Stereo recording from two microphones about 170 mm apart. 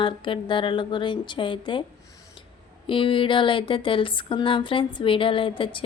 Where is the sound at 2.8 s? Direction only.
30° left (ahead or behind).